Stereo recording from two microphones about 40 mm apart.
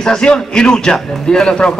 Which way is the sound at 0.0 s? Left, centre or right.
Centre.